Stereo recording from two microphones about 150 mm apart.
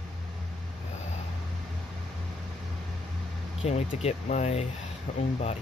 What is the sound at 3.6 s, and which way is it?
Speech, 45° left (ahead or behind).